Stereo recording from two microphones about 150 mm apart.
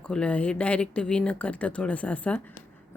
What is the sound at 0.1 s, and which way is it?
Speech, 5° left (ahead or behind).